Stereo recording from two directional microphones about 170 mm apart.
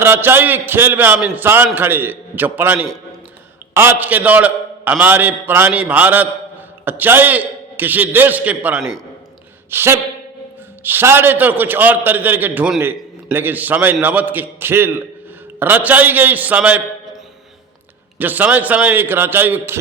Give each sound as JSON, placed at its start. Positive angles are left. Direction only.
{"t": 0.0, "sound": "a man's voice", "side_deg": -15}
{"t": 9.6, "sound": "a sound", "side_deg": -15}
{"t": 10.8, "sound": "a man's voice", "side_deg": -15}
{"t": 18.2, "sound": "a man's voice", "side_deg": -10}